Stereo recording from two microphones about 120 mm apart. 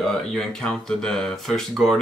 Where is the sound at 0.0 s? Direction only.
5° left (ahead or behind).